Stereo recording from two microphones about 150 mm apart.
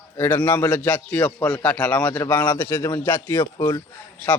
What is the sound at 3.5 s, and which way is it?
Speech, 30° left (ahead or behind).